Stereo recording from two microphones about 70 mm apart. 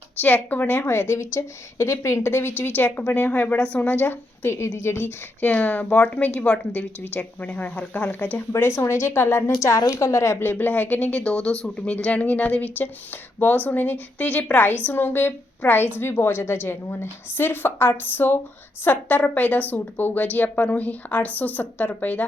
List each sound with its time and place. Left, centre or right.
0.2 s a woman's voice: left
2.3 s a woman's voice: left
9.5 s a woman's voice: left